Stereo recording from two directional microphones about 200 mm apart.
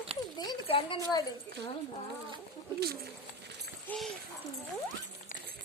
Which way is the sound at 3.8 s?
Centre (ahead or behind).